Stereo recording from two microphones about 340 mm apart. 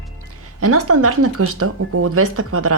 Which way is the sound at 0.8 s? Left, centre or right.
Right.